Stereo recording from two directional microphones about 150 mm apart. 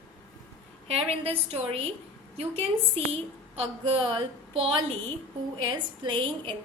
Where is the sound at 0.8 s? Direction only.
45° right (ahead or behind).